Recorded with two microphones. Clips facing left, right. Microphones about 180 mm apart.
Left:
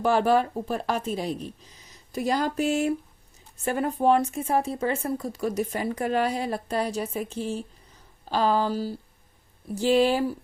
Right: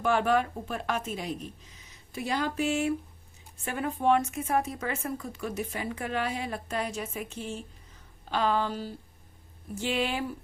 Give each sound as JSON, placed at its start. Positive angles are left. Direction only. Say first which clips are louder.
{"t": 0.0, "sound": "speech", "louder": "left 4 dB", "side_deg": 35}